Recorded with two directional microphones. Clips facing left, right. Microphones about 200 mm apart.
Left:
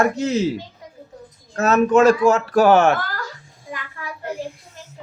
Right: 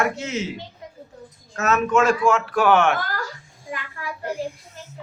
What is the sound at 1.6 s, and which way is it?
Speech, 35° left (ahead or behind).